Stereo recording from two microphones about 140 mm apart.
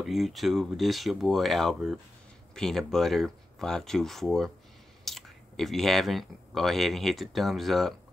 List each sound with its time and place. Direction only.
0.0 s speech: centre (ahead or behind)